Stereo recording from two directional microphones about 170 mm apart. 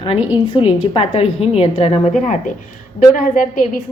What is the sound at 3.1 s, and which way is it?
Speech, 50° left (ahead or behind).